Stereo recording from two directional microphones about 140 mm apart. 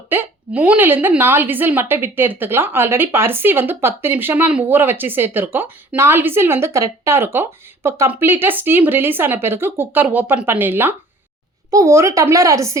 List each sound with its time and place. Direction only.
0.1 s speech: 15° right (ahead or behind)